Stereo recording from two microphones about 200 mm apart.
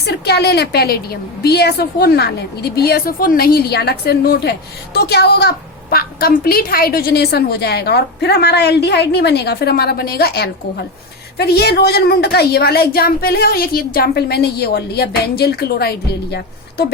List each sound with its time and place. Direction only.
0.0 s a woman's voice: 55° left (ahead or behind)